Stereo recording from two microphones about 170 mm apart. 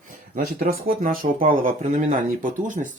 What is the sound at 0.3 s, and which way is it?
Speech, 55° right (ahead or behind).